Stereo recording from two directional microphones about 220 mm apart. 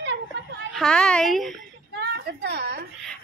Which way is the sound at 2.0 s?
50° right (ahead or behind).